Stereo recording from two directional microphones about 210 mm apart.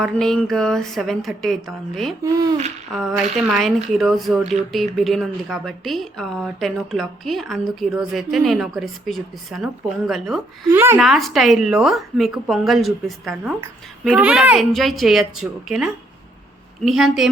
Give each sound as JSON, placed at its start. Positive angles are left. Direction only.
{"t": 0.0, "sound": "speech", "side_deg": 0}